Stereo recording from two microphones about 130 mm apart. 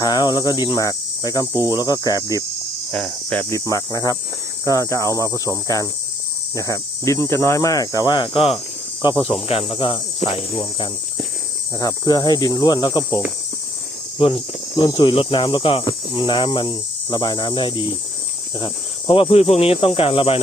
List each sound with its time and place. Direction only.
0.0 s cricket: 30° left (ahead or behind)
2.9 s cricket: centre (ahead or behind)
3.3 s cricket: 25° left (ahead or behind)
5.0 s speech: 25° right (ahead or behind)
5.6 s cricket: 25° left (ahead or behind); by 8.5 s 45° left (ahead or behind)
9.0 s cricket: 35° left (ahead or behind)
11.8 s speech: 30° left (ahead or behind)
14.2 s cricket: 45° left (ahead or behind)
14.8 s speech: 40° left (ahead or behind)
18.6 s cricket: 40° left (ahead or behind)